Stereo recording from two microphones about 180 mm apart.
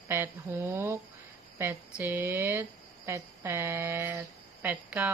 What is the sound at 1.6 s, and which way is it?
A woman's voice, 10° right (ahead or behind).